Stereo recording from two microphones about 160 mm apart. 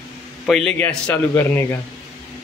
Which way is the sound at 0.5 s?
Centre (ahead or behind).